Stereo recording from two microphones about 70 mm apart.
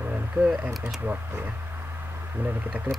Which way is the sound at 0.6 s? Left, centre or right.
Right.